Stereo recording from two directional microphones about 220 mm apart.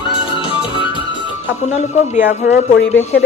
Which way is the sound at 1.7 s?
30° left (ahead or behind).